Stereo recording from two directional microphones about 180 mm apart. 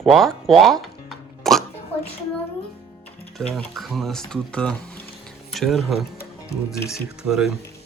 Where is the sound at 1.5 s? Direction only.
Centre (ahead or behind).